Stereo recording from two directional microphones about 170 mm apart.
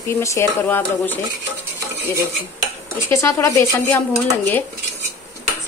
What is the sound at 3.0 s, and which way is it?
Speech, 15° left (ahead or behind).